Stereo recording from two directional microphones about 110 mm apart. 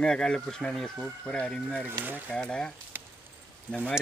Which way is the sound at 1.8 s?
20° right (ahead or behind).